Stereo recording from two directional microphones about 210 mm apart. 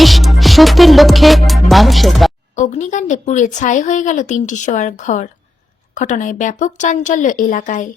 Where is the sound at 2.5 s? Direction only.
35° left (ahead or behind).